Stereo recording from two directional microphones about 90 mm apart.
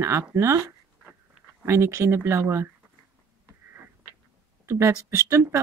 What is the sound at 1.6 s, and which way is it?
Speech, 30° right (ahead or behind).